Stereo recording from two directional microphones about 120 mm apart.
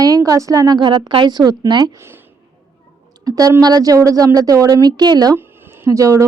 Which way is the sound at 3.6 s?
30° right (ahead or behind).